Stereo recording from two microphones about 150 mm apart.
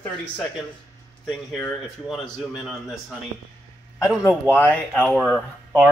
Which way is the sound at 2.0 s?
Centre (ahead or behind).